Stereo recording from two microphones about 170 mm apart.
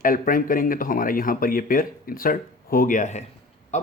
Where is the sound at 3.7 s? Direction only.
45° left (ahead or behind).